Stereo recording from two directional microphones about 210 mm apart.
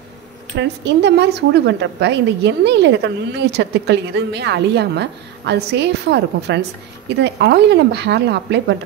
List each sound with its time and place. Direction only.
0.6 s a woman's voice: 55° right (ahead or behind)